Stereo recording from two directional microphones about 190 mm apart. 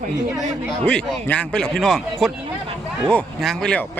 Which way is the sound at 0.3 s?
10° right (ahead or behind).